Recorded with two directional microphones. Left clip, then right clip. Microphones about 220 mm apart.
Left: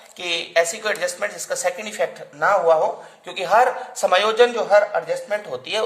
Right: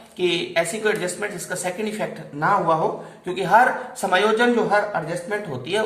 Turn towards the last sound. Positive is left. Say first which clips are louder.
# left 1 dB
turn(degrees=50)  # may be behind; listen again after turning